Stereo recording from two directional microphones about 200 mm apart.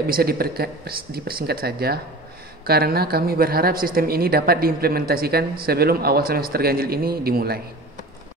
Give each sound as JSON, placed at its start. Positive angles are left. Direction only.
{"t": 0.0, "sound": "speech", "side_deg": -50}